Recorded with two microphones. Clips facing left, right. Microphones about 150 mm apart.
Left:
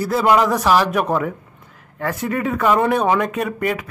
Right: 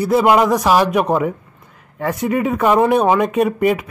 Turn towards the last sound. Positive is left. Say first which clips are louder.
# right 6 dB
turn(degrees=-20)  # may be behind; listen again after turning